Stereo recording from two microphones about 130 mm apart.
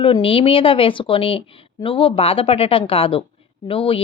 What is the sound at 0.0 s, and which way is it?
Speech, 45° left (ahead or behind).